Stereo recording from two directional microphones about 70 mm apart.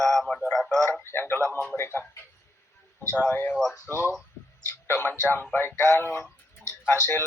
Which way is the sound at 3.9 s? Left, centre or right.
Left.